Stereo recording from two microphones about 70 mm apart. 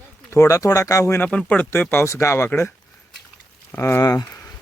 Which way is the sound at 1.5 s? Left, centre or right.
Left.